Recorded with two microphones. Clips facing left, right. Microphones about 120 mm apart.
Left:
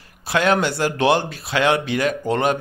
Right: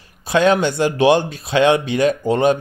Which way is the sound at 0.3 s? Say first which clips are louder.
Right 4 dB; 20° right (ahead or behind).